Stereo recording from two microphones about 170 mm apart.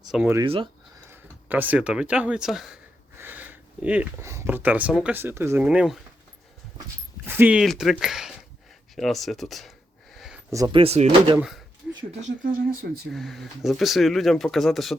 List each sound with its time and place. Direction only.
0.4 s speech: 35° right (ahead or behind)
1.1 s speech: 10° right (ahead or behind)
7.3 s speech: 10° right (ahead or behind)
10.5 s speech: 20° right (ahead or behind)
10.8 s speech: 35° right (ahead or behind)
11.3 s speech: centre (ahead or behind)
12.2 s speech: 55° right (ahead or behind)
13.1 s speech: centre (ahead or behind)